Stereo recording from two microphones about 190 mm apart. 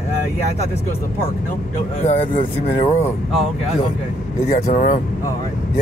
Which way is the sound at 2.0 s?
30° left (ahead or behind).